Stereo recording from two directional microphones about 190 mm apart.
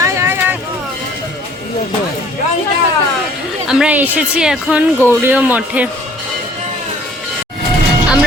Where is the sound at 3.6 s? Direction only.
5° right (ahead or behind).